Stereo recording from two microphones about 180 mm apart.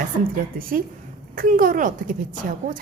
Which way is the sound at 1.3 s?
50° right (ahead or behind).